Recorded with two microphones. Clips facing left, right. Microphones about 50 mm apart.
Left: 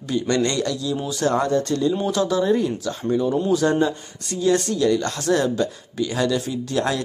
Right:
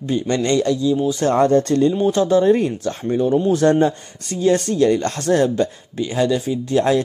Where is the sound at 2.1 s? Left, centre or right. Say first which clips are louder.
Right 5 dB; right.